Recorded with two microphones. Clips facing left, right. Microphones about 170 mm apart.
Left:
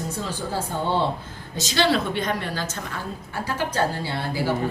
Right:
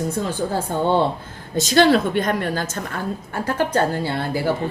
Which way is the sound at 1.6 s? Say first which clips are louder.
Right 7 dB; 50° right (ahead or behind).